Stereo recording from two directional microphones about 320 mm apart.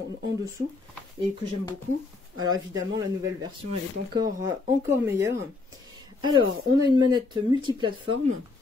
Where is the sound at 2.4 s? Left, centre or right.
Centre.